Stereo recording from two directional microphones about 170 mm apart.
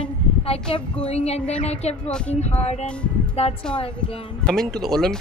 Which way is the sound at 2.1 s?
5° left (ahead or behind).